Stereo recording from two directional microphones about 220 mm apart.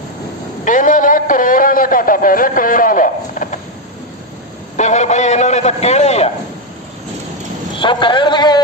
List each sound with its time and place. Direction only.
0.6 s a sound: 35° left (ahead or behind)
4.8 s a man's voice: 30° left (ahead or behind)
7.8 s speech: 20° left (ahead or behind)